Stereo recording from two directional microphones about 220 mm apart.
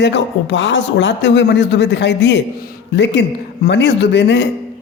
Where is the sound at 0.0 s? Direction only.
55° left (ahead or behind).